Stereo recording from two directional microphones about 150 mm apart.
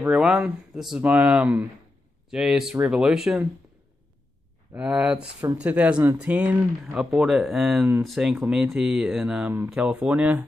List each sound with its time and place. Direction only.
0.1 s speech: 5° right (ahead or behind)
4.7 s speech: 10° right (ahead or behind)